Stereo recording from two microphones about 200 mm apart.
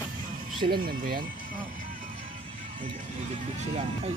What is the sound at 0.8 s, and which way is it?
Speech, 45° right (ahead or behind).